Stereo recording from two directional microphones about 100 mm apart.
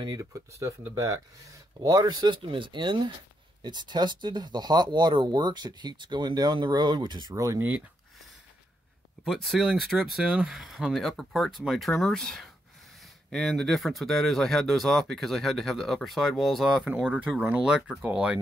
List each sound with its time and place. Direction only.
0.0 s speech: 45° right (ahead or behind)
0.3 s speech: 30° right (ahead or behind)
9.2 s speech: centre (ahead or behind)